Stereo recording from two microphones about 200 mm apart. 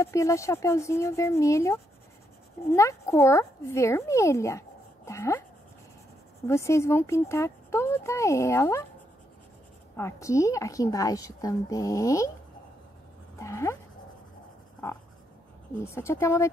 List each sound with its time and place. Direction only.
0.0 s speech: 15° left (ahead or behind)
6.4 s speech: 15° left (ahead or behind)
9.9 s speech: 15° left (ahead or behind)
13.4 s speech: 15° left (ahead or behind)
15.8 s speech: 15° left (ahead or behind)